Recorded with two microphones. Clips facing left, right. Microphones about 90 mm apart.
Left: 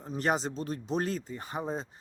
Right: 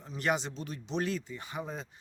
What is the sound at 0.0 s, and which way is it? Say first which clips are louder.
Speech: left 2 dB; 35° left (ahead or behind).